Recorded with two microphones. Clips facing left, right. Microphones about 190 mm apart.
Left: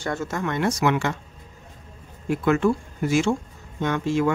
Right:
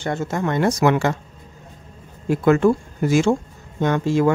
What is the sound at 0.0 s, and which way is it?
Speech, 25° right (ahead or behind).